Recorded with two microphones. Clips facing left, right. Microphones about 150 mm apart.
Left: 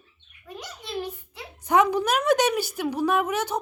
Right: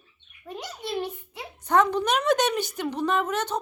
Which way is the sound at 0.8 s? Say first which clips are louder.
Right 2 dB; 25° right (ahead or behind).